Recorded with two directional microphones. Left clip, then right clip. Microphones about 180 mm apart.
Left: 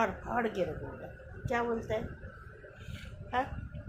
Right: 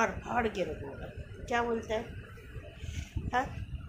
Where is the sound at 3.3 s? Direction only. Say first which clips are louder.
Right 1 dB; 10° right (ahead or behind).